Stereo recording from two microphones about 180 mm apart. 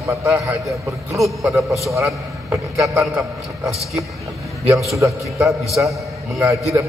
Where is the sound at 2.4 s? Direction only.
15° right (ahead or behind).